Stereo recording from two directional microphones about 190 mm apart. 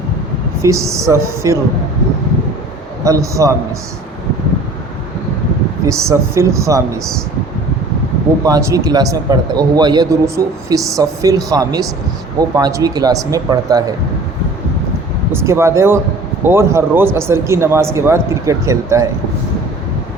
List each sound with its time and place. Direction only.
0.9 s speech: 15° right (ahead or behind)
3.0 s speech: 15° right (ahead or behind)
5.8 s speech: 15° right (ahead or behind)
8.4 s a man's voice: 20° right (ahead or behind)
15.3 s speech: 15° right (ahead or behind)